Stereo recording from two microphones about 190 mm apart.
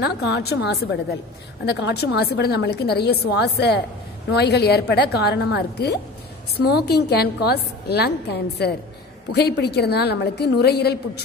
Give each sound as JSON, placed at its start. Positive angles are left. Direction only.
{"t": 0.0, "sound": "a woman's voice", "side_deg": 60}